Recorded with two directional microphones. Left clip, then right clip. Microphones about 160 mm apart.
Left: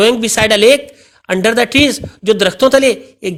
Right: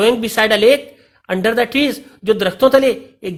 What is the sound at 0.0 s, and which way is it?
Speech, 25° left (ahead or behind).